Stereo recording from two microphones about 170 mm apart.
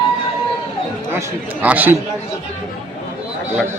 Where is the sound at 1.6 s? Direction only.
10° right (ahead or behind).